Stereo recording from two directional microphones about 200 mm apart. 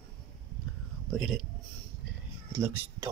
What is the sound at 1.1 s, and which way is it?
Speech, centre (ahead or behind).